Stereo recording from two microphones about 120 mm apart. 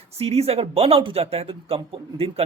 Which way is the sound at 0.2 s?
60° right (ahead or behind).